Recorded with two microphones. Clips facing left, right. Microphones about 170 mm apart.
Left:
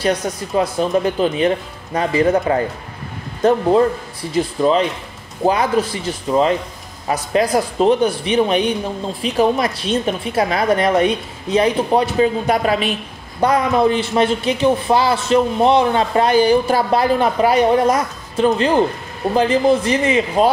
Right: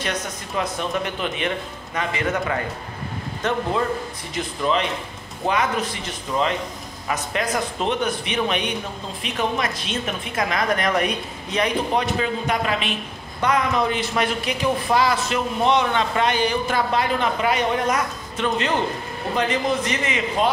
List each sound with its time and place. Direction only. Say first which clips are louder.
0.0 s speech: left 9 dB; 35° left (ahead or behind)